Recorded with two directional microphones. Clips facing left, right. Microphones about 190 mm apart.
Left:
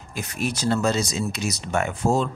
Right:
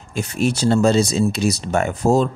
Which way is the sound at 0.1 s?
30° right (ahead or behind).